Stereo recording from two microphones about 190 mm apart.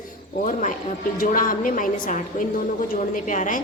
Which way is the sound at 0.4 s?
45° left (ahead or behind).